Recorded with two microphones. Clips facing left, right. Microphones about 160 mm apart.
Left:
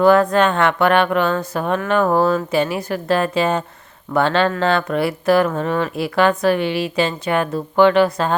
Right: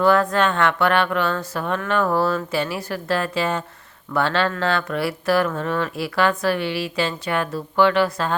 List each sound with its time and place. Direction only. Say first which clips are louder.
0.0 s a woman's voice: left 4 dB; 20° left (ahead or behind)